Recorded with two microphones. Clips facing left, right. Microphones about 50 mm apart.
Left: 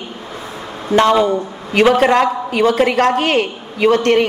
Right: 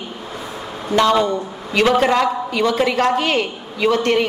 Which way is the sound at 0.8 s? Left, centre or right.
Left.